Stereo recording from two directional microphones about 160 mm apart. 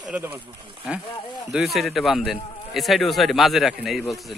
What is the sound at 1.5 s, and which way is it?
Speech, centre (ahead or behind).